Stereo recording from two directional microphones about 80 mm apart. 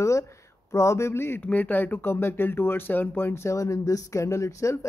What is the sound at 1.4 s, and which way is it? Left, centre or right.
Speech, centre.